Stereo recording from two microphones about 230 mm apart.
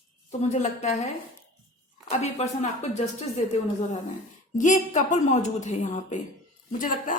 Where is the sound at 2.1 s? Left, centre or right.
Left.